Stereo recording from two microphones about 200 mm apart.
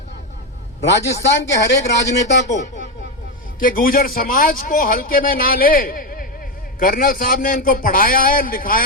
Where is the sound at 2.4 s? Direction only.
35° left (ahead or behind).